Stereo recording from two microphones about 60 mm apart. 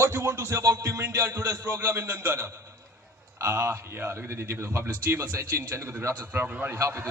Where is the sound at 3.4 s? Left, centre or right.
Right.